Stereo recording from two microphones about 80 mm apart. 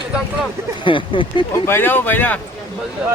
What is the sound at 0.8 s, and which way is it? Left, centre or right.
Speech, left.